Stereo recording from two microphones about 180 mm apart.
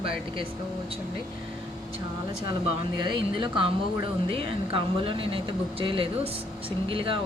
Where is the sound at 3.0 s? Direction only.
25° right (ahead or behind).